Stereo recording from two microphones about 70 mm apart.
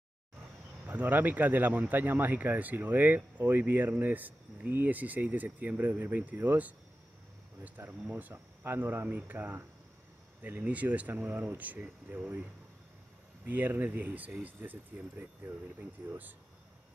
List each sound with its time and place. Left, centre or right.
0.8 s speech: right
13.5 s speech: right